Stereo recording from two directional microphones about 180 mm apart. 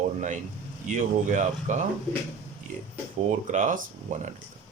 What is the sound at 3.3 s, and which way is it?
Speech, 45° right (ahead or behind).